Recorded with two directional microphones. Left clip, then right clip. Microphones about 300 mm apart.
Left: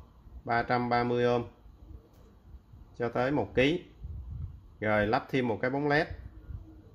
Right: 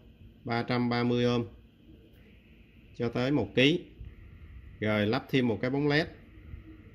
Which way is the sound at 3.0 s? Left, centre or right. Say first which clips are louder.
Left 1 dB; right.